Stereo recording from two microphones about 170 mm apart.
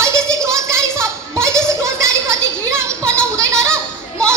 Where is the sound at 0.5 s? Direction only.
15° right (ahead or behind).